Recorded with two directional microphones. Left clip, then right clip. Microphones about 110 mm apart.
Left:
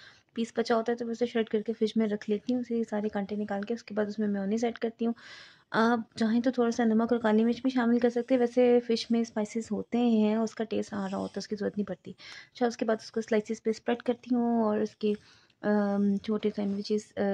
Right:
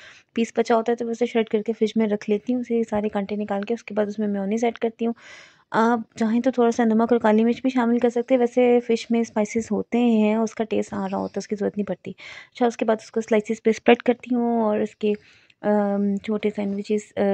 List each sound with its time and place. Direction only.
0.6 s speech: 40° right (ahead or behind)
9.2 s speech: 50° right (ahead or behind)
9.8 s speech: 40° right (ahead or behind)
13.7 s speech: 70° right (ahead or behind)
14.3 s speech: 20° right (ahead or behind)
16.6 s speech: 10° right (ahead or behind)